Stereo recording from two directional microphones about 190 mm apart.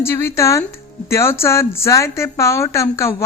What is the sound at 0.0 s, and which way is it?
Speech, 15° left (ahead or behind).